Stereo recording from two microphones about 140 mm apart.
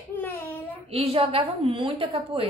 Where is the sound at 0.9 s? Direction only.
45° right (ahead or behind).